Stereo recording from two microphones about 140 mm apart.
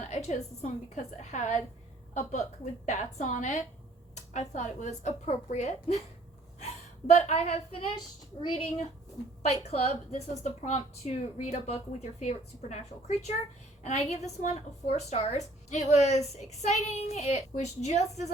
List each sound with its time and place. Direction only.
0.0 s a woman's voice: 55° left (ahead or behind)
7.1 s a woman's voice: 55° left (ahead or behind)
7.9 s a child's voice: 35° left (ahead or behind)
9.4 s a woman's voice: 50° left (ahead or behind)